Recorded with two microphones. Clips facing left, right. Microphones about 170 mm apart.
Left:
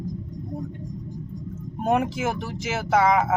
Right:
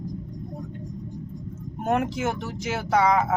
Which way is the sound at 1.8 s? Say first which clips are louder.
Left 1 dB; 10° left (ahead or behind).